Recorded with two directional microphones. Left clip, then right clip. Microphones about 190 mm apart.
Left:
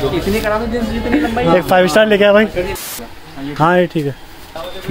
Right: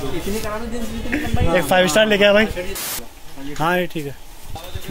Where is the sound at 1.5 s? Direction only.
25° left (ahead or behind).